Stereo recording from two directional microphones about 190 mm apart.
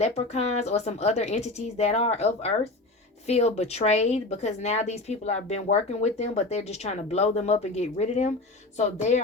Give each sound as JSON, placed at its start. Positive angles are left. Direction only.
{"t": 0.0, "sound": "a woman's voice", "side_deg": 35}